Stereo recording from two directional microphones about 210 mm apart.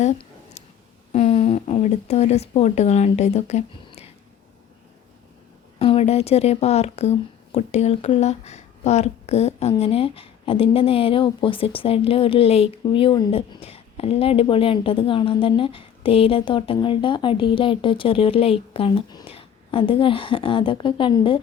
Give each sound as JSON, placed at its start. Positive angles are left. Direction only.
{"t": 0.0, "sound": "a sound", "side_deg": 35}
{"t": 1.1, "sound": "speech", "side_deg": 30}
{"t": 5.8, "sound": "speech", "side_deg": 30}